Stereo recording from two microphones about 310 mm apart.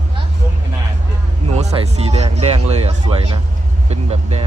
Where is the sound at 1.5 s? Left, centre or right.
Centre.